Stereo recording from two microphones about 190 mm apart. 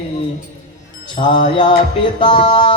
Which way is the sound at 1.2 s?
30° left (ahead or behind).